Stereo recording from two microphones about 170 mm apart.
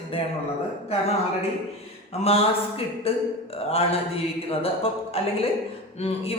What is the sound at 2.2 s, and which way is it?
Speech, 35° left (ahead or behind).